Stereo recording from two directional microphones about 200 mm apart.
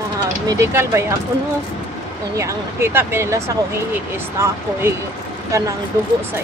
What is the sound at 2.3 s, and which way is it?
Speech, 15° right (ahead or behind).